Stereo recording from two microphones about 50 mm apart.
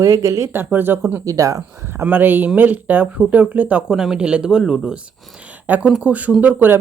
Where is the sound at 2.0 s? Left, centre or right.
Right.